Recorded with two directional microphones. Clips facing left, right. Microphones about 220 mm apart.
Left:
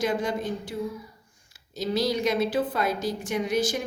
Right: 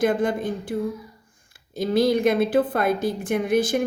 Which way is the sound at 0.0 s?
55° right (ahead or behind).